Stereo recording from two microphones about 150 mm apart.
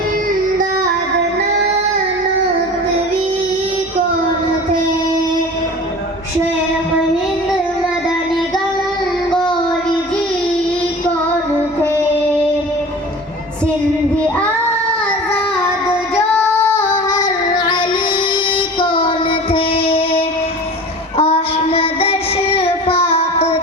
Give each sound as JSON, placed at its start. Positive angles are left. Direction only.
{"t": 16.3, "sound": "female singing", "side_deg": 20}
{"t": 21.2, "sound": "child singing", "side_deg": 40}